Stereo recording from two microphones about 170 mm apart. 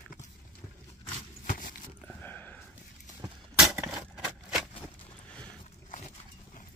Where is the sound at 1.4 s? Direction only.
50° left (ahead or behind).